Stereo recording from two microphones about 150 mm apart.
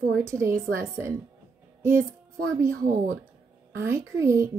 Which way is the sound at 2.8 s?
60° right (ahead or behind).